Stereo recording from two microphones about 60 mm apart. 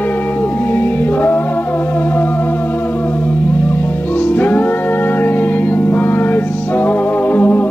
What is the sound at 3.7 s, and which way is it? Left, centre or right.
Music, left.